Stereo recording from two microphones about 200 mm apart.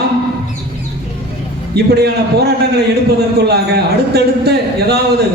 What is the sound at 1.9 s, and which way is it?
Speech, 55° right (ahead or behind).